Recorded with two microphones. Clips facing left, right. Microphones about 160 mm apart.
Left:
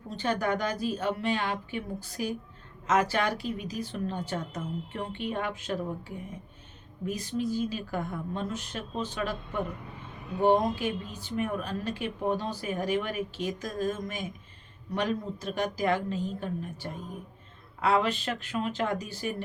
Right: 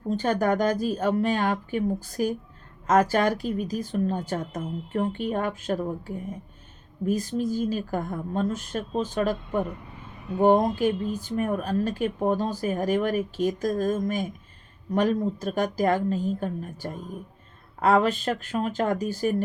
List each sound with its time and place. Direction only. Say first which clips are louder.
0.1 s speech: right 5 dB; 45° right (ahead or behind)